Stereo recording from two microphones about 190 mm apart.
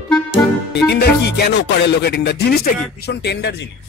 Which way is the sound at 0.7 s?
60° left (ahead or behind).